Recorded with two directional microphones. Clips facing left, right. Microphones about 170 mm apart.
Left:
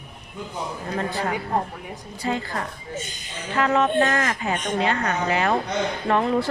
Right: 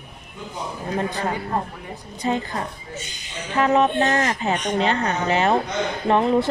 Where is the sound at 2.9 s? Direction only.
50° left (ahead or behind).